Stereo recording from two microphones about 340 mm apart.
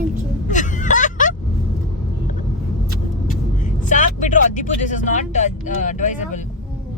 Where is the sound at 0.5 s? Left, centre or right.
Left.